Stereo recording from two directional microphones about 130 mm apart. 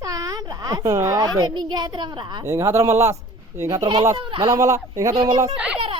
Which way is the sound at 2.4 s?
20° right (ahead or behind).